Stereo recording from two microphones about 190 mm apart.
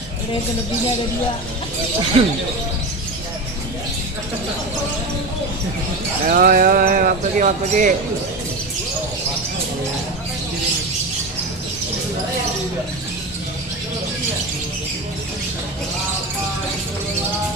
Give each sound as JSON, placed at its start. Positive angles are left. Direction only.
{"t": 2.2, "sound": "speech", "side_deg": -30}
{"t": 6.2, "sound": "speech", "side_deg": -45}